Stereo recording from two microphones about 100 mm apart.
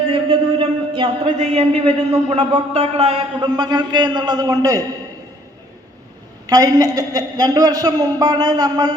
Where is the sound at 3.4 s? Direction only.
45° right (ahead or behind).